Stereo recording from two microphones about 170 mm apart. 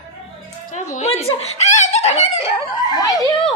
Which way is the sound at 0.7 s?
45° left (ahead or behind).